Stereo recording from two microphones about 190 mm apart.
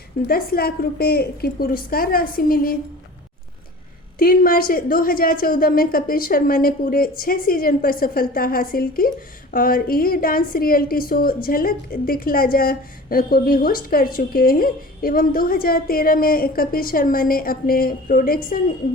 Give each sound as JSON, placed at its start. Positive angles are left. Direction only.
{"t": 0.3, "sound": "a woman's voice", "side_deg": 50}
{"t": 4.2, "sound": "a woman's voice", "side_deg": 50}